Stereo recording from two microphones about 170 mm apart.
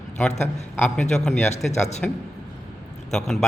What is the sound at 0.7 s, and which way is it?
A man's voice, 10° left (ahead or behind).